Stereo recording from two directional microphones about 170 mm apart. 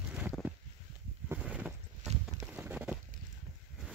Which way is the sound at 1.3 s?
10° right (ahead or behind).